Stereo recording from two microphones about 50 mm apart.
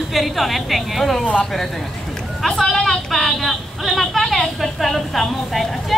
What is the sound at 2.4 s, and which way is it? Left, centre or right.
A woman's voice, centre.